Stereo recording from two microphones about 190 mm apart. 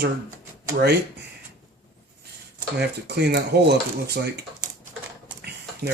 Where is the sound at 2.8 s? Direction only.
60° right (ahead or behind).